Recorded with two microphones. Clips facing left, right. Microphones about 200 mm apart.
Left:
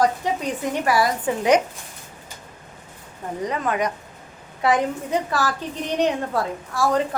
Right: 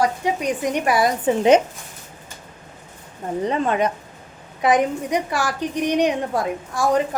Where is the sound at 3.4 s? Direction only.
25° right (ahead or behind).